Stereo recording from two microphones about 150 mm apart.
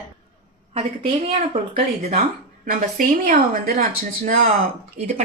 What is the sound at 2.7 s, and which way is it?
Speech, 60° right (ahead or behind).